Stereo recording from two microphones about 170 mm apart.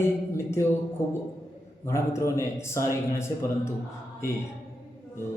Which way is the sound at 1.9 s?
15° left (ahead or behind).